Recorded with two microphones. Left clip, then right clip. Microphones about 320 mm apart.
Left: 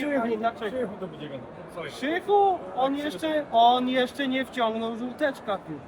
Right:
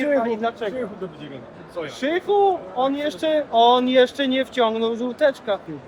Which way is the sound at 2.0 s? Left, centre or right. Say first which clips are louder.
Right 3 dB; right.